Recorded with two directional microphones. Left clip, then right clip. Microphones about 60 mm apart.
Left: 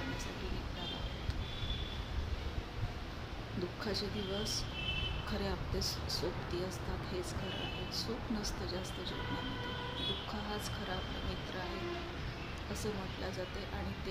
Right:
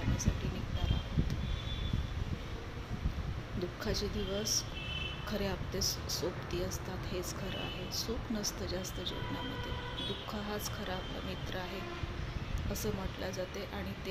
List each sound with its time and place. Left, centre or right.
3.8 s speech: right
7.9 s speech: right